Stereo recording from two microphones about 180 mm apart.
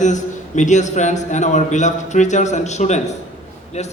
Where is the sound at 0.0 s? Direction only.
40° left (ahead or behind).